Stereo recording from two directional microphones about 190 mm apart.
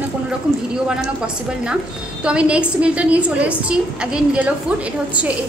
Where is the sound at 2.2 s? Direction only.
5° right (ahead or behind).